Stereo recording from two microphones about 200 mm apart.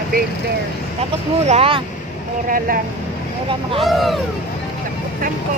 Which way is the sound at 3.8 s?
Centre (ahead or behind).